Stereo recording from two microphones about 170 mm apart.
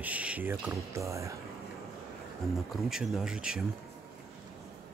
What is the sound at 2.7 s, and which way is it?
Speech, centre (ahead or behind).